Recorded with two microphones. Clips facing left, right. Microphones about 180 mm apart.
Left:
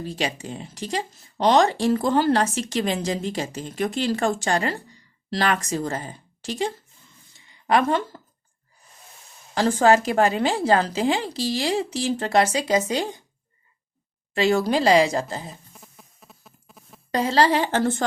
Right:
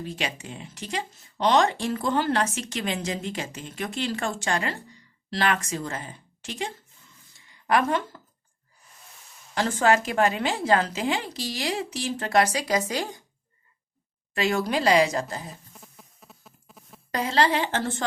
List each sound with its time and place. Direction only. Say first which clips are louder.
0.0 s a woman's voice: left 4 dB; 35° left (ahead or behind)
9.6 s speech: left 4 dB; 35° left (ahead or behind)
14.3 s a woman's voice: left 5 dB; 30° left (ahead or behind)
17.1 s speech: left 4 dB; 30° left (ahead or behind)